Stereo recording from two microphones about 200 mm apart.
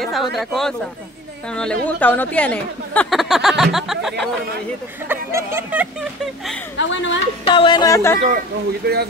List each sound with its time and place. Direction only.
0.0 s speech: centre (ahead or behind)
5.0 s speech: 10° right (ahead or behind)
6.8 s a woman's voice: 65° left (ahead or behind)
7.4 s a sound: 25° left (ahead or behind)
8.8 s speech: 50° right (ahead or behind)